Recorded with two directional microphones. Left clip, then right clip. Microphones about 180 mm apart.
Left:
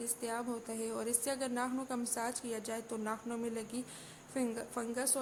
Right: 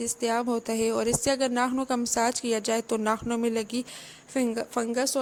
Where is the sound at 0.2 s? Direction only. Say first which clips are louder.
Right 14 dB; 40° right (ahead or behind).